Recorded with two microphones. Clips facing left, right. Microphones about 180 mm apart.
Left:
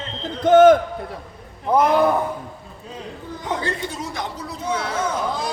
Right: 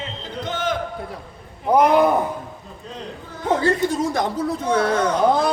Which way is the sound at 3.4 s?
45° right (ahead or behind).